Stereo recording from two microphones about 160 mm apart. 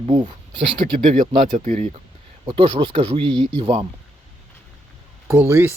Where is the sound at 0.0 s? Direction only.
30° right (ahead or behind).